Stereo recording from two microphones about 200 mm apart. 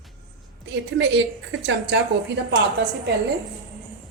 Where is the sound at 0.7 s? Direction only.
65° right (ahead or behind).